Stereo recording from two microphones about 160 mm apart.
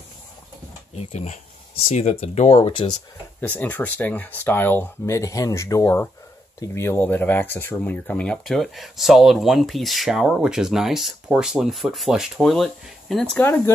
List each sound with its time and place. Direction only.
0.9 s speech: 40° left (ahead or behind)
3.3 s speech: 10° left (ahead or behind)